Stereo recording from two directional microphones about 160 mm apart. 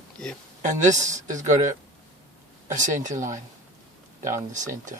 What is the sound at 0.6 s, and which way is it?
Speech, 50° right (ahead or behind).